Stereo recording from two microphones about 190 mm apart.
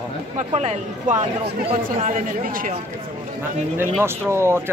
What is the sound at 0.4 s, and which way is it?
Speech, 40° right (ahead or behind).